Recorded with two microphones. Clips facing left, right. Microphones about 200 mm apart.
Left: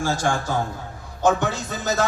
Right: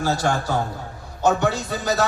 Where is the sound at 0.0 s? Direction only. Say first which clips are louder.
Right 1 dB; 45° left (ahead or behind).